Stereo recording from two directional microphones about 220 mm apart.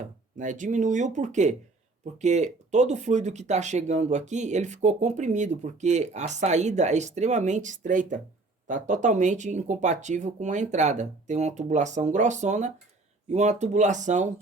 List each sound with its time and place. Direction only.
0.3 s speech: 35° right (ahead or behind)